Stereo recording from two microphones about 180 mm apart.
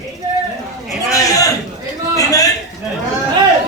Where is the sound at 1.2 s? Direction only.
20° left (ahead or behind).